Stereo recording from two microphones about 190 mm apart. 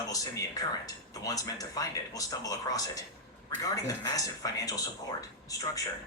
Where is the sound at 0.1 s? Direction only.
20° left (ahead or behind).